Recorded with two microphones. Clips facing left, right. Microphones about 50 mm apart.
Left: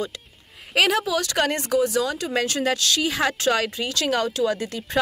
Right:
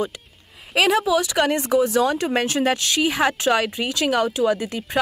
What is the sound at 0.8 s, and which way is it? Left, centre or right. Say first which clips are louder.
Speech: right 4 dB; right.